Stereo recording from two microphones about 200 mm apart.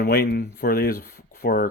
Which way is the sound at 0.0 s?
55° left (ahead or behind).